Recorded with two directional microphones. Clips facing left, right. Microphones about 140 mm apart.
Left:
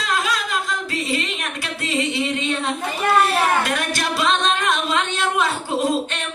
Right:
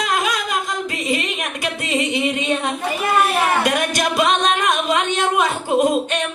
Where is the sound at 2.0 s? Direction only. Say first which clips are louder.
Right 3 dB; 15° right (ahead or behind).